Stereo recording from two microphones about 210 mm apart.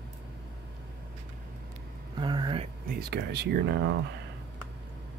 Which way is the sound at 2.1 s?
20° right (ahead or behind).